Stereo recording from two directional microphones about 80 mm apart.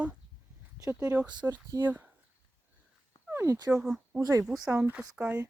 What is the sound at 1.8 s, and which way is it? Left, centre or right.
Speech, right.